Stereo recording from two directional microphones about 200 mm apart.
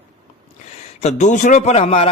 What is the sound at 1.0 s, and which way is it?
Speech, 35° left (ahead or behind).